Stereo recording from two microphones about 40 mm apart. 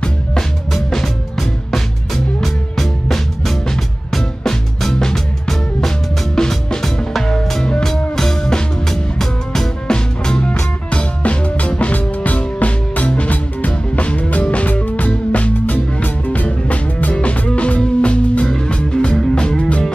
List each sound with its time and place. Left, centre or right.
0.0 s music: left
0.7 s music: centre
9.9 s music: left